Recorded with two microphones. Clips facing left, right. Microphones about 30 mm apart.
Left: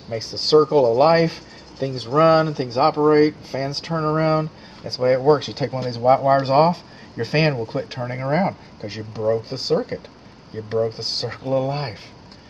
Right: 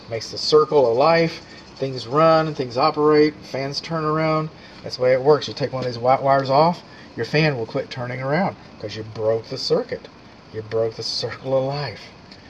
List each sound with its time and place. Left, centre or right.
0.2 s speech: centre
0.7 s speech: centre
3.1 s speech: centre
7.6 s speech: centre